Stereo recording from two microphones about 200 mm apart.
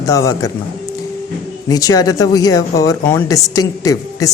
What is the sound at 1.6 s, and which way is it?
Speech, 20° left (ahead or behind).